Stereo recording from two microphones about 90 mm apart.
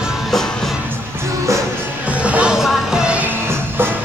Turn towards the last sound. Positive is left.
turn(degrees=-10)  # may be behind; listen again after turning